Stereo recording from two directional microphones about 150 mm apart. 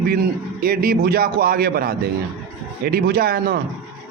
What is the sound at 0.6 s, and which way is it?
Speech, 80° right.